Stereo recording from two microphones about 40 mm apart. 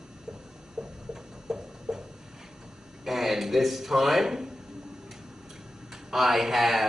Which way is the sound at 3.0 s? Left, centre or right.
Centre.